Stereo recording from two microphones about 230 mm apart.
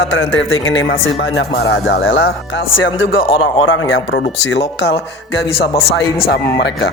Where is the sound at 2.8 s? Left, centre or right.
Left.